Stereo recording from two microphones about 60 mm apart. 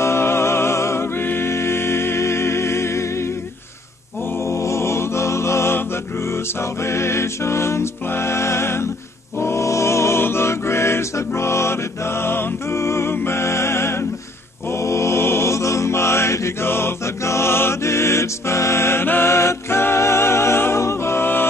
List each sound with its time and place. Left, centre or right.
0.0 s music: left
1.2 s music: left
4.5 s music: left
14.7 s mantra: left
20.8 s music: left